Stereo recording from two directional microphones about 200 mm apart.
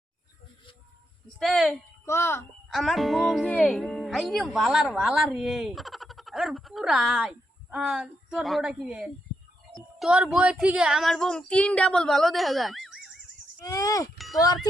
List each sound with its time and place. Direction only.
1.4 s speech: centre (ahead or behind)
2.0 s speech: 10° left (ahead or behind)
2.7 s speech: centre (ahead or behind)
13.7 s speech: 15° left (ahead or behind)